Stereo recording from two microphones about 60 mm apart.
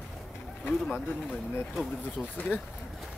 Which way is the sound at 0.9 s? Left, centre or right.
Left.